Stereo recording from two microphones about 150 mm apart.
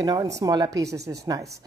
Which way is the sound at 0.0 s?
25° right (ahead or behind).